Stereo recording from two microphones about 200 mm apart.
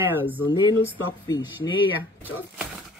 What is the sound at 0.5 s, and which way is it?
Speech, 20° left (ahead or behind).